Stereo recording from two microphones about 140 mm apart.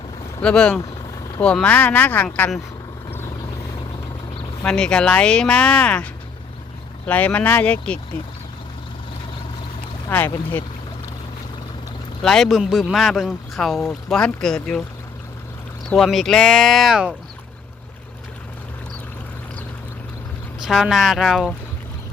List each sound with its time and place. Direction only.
0.4 s speech: 5° left (ahead or behind)
4.6 s speech: 5° left (ahead or behind)
10.1 s speech: 15° left (ahead or behind)
12.2 s speech: 5° left (ahead or behind)
15.9 s speech: centre (ahead or behind)
20.7 s speech: centre (ahead or behind)